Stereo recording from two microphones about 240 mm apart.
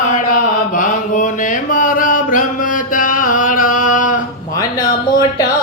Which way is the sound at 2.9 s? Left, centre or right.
Left.